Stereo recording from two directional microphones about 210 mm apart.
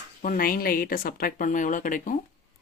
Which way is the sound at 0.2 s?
40° left (ahead or behind).